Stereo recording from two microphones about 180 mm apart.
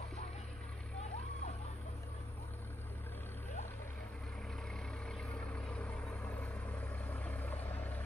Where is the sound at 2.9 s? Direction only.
10° left (ahead or behind).